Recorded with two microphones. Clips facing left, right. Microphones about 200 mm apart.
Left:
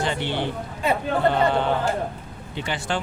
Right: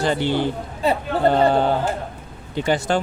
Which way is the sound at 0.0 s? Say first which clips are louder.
Right 5 dB; 40° right (ahead or behind).